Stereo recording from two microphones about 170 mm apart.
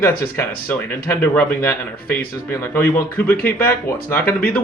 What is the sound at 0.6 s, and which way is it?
Speech, 10° left (ahead or behind).